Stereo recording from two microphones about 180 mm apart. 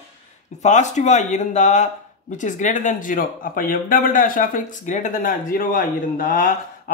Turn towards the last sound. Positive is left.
turn(degrees=45)  # may be behind; listen again after turning